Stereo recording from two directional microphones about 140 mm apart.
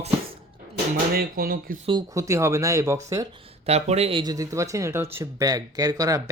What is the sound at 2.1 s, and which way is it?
Speech, 20° right (ahead or behind).